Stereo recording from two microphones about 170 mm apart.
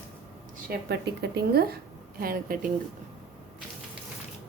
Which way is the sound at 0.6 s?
80° right.